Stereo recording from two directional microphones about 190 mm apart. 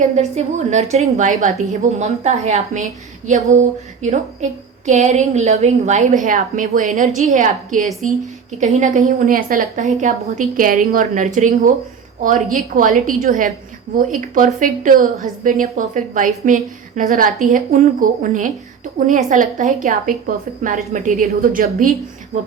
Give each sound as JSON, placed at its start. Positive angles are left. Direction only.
{"t": 0.2, "sound": "a woman's voice", "side_deg": -35}